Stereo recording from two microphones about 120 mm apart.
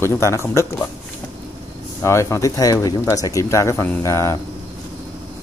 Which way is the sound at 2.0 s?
25° left (ahead or behind).